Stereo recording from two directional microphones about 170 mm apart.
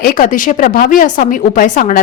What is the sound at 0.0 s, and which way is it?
A woman's voice, 55° left (ahead or behind).